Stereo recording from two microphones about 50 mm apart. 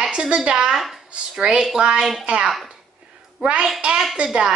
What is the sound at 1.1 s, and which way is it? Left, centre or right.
A woman's voice, centre.